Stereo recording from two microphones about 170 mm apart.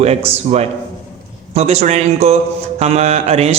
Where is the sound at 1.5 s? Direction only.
40° right (ahead or behind).